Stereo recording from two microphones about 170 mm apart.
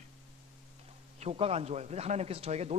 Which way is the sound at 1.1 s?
35° right (ahead or behind).